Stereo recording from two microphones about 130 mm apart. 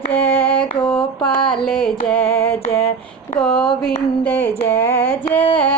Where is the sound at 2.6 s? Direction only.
50° left (ahead or behind).